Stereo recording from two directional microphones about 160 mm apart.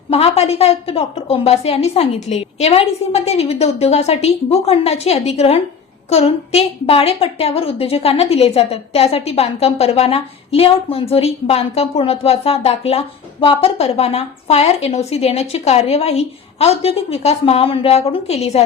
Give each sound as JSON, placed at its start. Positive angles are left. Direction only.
{"t": 0.1, "sound": "a woman's voice", "side_deg": 40}